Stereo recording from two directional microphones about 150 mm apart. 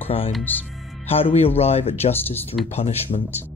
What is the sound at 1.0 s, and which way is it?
Speech, 40° left (ahead or behind).